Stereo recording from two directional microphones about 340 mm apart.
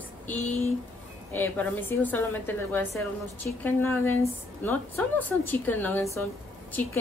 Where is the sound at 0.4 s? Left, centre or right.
Centre.